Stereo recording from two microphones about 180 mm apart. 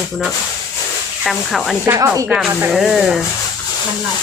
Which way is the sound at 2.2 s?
5° right (ahead or behind).